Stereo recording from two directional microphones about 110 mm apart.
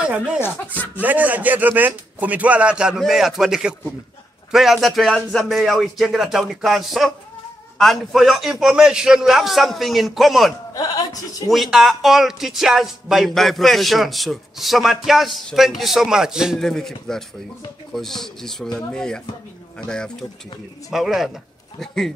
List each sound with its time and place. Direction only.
0.0 s a man's voice: 10° right (ahead or behind)
10.7 s speech: 35° left (ahead or behind)
11.5 s speech: centre (ahead or behind)
16.6 s speech: 5° left (ahead or behind)